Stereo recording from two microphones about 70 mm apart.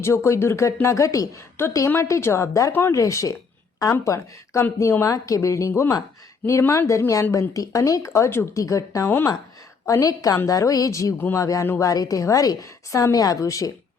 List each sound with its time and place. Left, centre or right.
0.0 s speech: left
1.6 s a woman's voice: left
4.8 s a woman's voice: left
5.0 s speech: left
8.5 s speech: left
9.0 s a woman's voice: left
9.8 s a woman's voice: left